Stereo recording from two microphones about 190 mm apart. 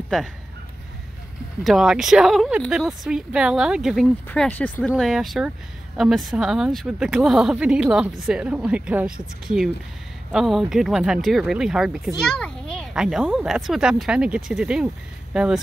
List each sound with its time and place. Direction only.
1.6 s speech: centre (ahead or behind)
10.3 s speech: centre (ahead or behind)